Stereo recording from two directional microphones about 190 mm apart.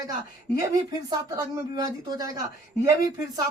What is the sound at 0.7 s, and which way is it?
Speech, 20° right (ahead or behind).